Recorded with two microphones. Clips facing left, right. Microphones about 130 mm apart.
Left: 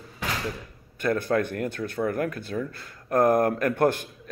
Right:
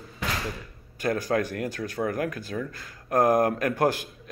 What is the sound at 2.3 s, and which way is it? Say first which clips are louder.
Speech: left 1 dB; 45° right (ahead or behind).